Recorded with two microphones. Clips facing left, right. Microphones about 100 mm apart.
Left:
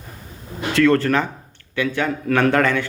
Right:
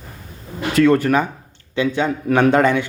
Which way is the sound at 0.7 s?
15° right (ahead or behind).